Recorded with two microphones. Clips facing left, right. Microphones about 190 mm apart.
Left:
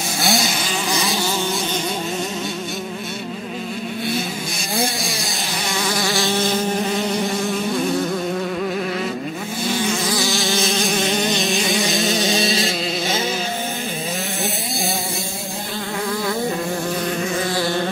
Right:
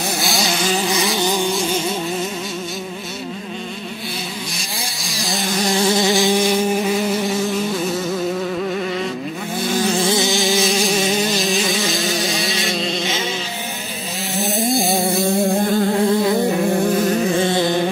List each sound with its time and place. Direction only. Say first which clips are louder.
0.2 s vehicle: left 6 dB; centre (ahead or behind)
4.7 s vehicle: left 9 dB; centre (ahead or behind)
5.7 s insect: right 6 dB; 25° right (ahead or behind)
9.9 s insect: right 4 dB; 25° right (ahead or behind)
10.3 s insect: right 3 dB; centre (ahead or behind)
14.7 s a sound: right 7 dB; centre (ahead or behind)
17.4 s music: right 4 dB; 20° right (ahead or behind)